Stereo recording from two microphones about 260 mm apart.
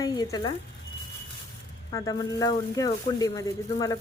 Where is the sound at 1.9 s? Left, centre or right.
Centre.